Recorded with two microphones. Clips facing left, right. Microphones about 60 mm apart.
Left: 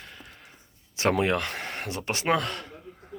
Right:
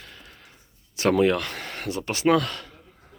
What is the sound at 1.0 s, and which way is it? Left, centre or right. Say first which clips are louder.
Speech: right 4 dB; left.